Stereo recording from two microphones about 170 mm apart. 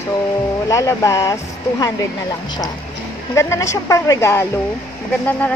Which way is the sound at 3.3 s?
15° left (ahead or behind).